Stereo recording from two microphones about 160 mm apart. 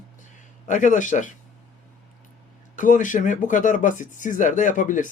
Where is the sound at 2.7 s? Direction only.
55° left (ahead or behind).